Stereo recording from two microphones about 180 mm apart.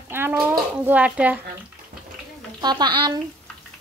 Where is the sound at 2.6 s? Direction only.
25° right (ahead or behind).